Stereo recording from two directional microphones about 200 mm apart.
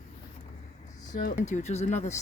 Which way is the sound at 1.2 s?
35° left (ahead or behind).